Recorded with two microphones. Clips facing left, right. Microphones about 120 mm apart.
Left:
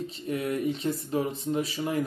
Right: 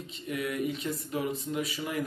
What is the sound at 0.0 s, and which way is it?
Speech, 35° left (ahead or behind).